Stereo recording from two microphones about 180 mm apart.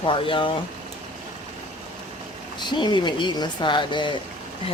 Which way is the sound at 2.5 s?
25° left (ahead or behind).